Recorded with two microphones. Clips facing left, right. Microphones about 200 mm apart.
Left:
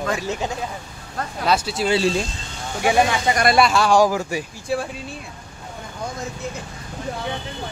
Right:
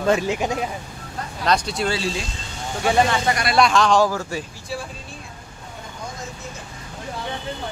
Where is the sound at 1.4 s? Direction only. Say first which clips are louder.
Left 1 dB; 5° left (ahead or behind).